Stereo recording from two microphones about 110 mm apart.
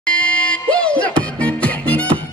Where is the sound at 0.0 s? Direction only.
10° left (ahead or behind).